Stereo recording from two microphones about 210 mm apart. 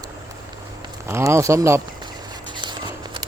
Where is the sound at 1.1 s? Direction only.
10° right (ahead or behind).